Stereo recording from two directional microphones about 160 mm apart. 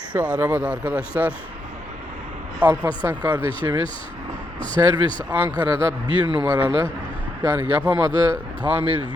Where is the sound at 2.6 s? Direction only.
10° right (ahead or behind).